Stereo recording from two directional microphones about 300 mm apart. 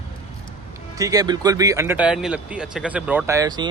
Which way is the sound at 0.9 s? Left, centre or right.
Centre.